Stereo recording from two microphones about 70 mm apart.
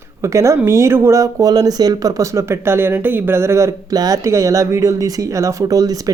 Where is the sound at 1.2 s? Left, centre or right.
Right.